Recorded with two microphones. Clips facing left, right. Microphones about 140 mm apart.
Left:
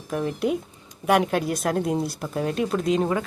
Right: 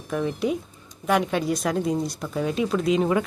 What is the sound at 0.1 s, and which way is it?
Speech, 5° left (ahead or behind).